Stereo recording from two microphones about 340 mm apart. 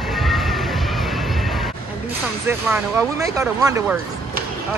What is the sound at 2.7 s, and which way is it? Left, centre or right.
Speech, centre.